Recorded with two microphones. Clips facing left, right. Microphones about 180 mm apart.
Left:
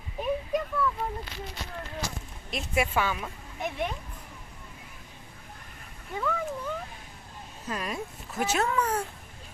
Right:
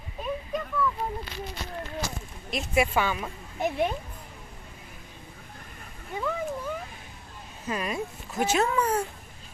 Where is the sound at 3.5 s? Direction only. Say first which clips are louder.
Right 5 dB; 30° right (ahead or behind).